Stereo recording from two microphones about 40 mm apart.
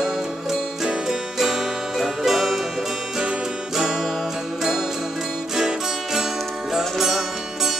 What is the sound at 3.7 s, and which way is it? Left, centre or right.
Music, centre.